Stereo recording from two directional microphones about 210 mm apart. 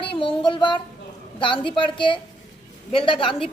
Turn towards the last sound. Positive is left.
turn(degrees=25)  # may be behind; listen again after turning